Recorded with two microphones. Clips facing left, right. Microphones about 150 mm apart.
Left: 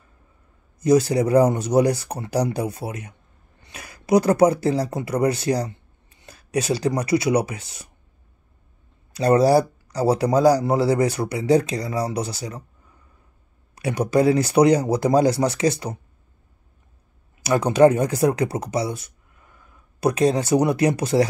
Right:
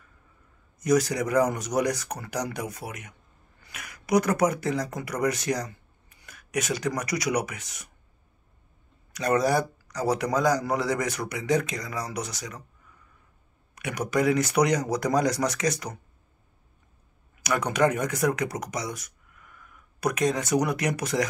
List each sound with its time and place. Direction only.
0.7 s speech: 30° left (ahead or behind)
9.1 s a man's voice: 30° left (ahead or behind)
13.7 s speech: 30° left (ahead or behind)
17.4 s speech: 30° left (ahead or behind)